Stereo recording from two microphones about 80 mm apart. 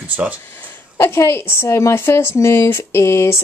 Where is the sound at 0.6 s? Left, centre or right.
Left.